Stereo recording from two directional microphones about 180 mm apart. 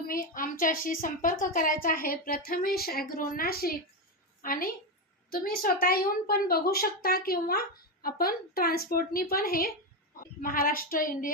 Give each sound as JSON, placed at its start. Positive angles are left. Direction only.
{"t": 0.0, "sound": "a woman's voice", "side_deg": 55}